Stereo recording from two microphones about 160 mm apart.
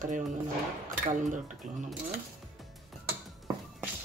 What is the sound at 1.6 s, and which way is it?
Speech, 45° right (ahead or behind).